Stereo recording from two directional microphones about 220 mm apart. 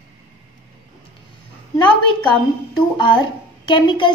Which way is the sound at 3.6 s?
20° left (ahead or behind).